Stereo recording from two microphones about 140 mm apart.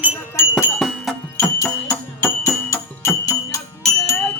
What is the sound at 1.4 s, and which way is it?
Music, 20° left (ahead or behind).